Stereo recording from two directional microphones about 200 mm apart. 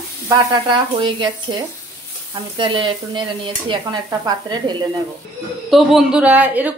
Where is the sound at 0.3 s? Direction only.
25° right (ahead or behind).